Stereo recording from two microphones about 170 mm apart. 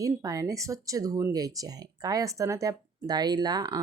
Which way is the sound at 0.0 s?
20° right (ahead or behind).